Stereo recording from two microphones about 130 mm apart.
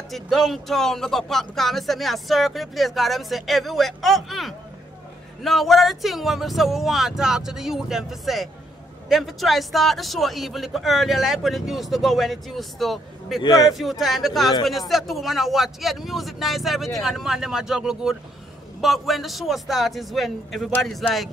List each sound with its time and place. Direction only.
0.1 s speech: centre (ahead or behind)
13.4 s a man's voice: 35° left (ahead or behind)
13.7 s speech: centre (ahead or behind)